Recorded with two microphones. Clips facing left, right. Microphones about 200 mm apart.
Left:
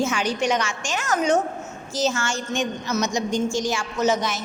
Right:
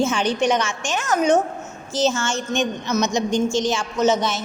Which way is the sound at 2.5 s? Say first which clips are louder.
Right 3 dB; 20° right (ahead or behind).